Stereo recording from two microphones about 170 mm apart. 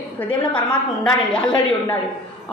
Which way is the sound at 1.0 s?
5° left (ahead or behind).